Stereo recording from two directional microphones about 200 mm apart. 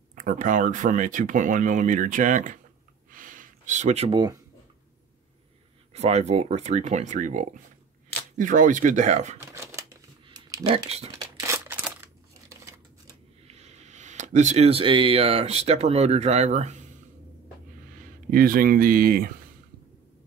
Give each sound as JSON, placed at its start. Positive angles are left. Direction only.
{"t": 0.1, "sound": "speech", "side_deg": -40}
{"t": 3.1, "sound": "a sound", "side_deg": -40}
{"t": 5.9, "sound": "speech", "side_deg": -35}
{"t": 9.4, "sound": "shuffling cards", "side_deg": -15}
{"t": 10.2, "sound": "typing", "side_deg": -20}
{"t": 11.1, "sound": "crumpling", "side_deg": -15}
{"t": 12.4, "sound": "scissors", "side_deg": -15}
{"t": 13.5, "sound": "speech", "side_deg": -35}
{"t": 17.9, "sound": "speech", "side_deg": -45}